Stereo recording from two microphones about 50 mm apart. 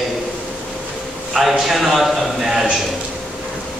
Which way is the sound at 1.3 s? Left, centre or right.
Centre.